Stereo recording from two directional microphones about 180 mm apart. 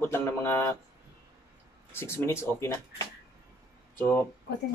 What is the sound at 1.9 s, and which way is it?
Speech, 15° left (ahead or behind).